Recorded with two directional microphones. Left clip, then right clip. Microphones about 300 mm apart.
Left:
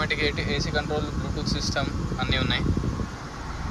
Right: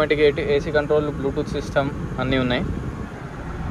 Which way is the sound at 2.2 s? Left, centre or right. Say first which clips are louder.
Right 4 dB; centre.